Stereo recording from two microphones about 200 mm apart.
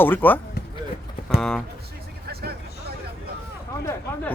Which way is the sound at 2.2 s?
50° right (ahead or behind).